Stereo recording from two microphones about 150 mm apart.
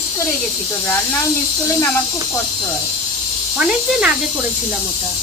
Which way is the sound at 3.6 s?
5° right (ahead or behind).